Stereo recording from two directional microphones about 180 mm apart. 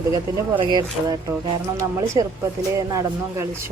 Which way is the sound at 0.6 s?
25° right (ahead or behind).